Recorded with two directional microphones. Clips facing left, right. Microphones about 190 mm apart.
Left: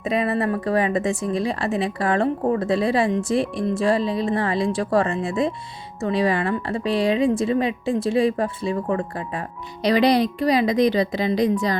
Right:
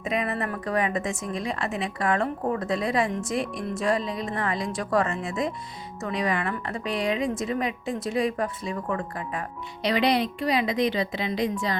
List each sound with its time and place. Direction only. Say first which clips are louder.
0.0 s a woman's voice: left 6 dB; 35° left (ahead or behind)